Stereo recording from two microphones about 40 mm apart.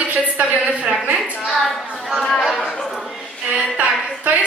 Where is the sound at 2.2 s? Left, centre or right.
Centre.